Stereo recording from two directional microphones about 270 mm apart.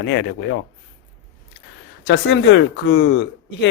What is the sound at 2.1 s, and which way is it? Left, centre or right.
Speech, left.